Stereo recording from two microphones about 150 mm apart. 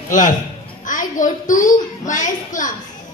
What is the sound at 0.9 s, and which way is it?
A child's voice, 60° left (ahead or behind).